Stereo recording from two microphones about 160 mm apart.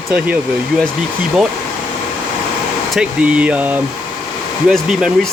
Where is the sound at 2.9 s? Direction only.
5° right (ahead or behind).